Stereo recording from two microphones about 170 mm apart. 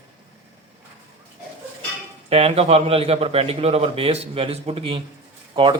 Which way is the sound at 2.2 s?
35° right (ahead or behind).